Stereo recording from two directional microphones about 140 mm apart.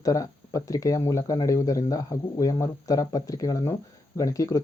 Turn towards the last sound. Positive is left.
turn(degrees=25)  # may be behind; listen again after turning